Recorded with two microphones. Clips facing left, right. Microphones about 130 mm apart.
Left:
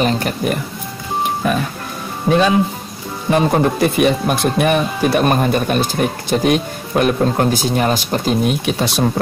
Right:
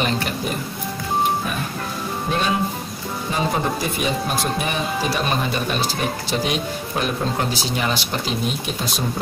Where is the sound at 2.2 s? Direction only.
90° left.